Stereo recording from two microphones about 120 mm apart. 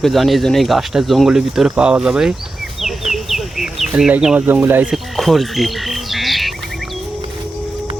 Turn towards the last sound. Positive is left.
turn(degrees=0)  # may be behind; listen again after turning